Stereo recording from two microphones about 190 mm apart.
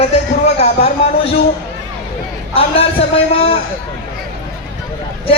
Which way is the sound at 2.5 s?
30° left (ahead or behind).